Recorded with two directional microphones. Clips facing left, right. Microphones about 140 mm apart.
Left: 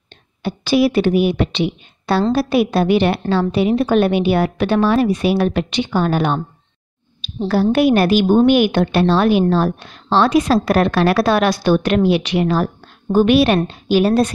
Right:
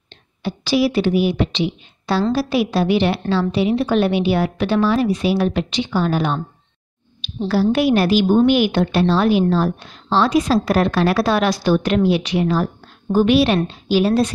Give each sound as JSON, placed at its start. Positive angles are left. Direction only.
{"t": 0.4, "sound": "a woman's voice", "side_deg": 55}
{"t": 7.7, "sound": "a woman's voice", "side_deg": 55}